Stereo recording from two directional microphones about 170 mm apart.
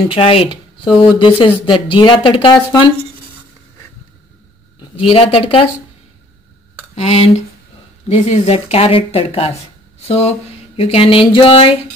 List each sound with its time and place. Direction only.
0.1 s speech: 35° left (ahead or behind)
5.0 s speech: 30° left (ahead or behind)
7.0 s speech: 35° left (ahead or behind)